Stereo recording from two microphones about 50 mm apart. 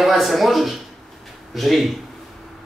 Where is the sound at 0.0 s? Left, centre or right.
Centre.